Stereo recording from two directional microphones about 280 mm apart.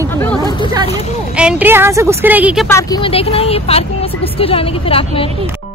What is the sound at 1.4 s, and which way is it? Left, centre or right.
A woman's voice, centre.